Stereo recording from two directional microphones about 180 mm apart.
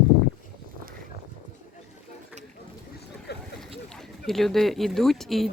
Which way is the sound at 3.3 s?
65° left (ahead or behind).